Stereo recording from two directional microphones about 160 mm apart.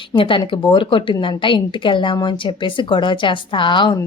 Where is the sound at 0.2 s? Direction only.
30° left (ahead or behind).